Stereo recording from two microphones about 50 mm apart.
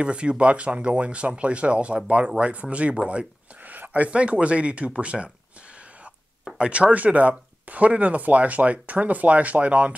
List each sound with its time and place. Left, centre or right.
0.0 s speech: right
3.6 s speech: right
6.6 s speech: right